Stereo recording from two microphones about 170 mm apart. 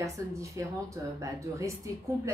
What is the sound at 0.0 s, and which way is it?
Speech, 15° right (ahead or behind).